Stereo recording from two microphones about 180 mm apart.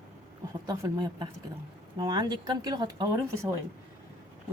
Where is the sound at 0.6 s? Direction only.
25° right (ahead or behind).